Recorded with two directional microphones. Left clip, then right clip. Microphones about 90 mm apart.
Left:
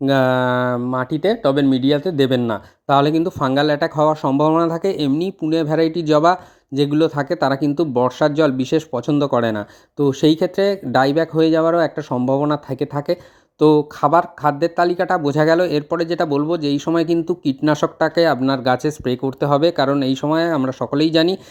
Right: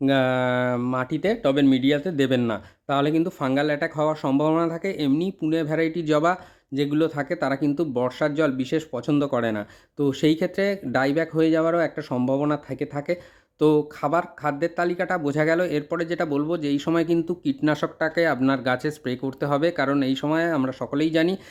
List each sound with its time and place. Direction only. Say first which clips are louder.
0.1 s speech: left 7 dB; 30° left (ahead or behind)
4.6 s speech: left 6 dB; 45° left (ahead or behind)
5.5 s speech: left 7 dB; 30° left (ahead or behind)
14.0 s speech: left 8 dB; 35° left (ahead or behind)
17.7 s speech: left 7 dB; 40° left (ahead or behind)